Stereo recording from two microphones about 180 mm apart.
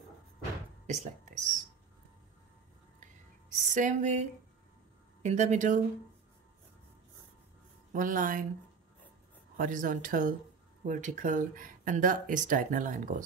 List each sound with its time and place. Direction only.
0.8 s speech: 40° right (ahead or behind)
3.7 s a sound: 45° right (ahead or behind)
7.9 s speech: 50° right (ahead or behind)
9.6 s speech: 50° right (ahead or behind)